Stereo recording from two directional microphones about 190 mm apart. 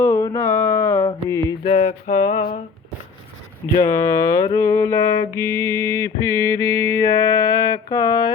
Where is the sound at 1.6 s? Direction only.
40° left (ahead or behind).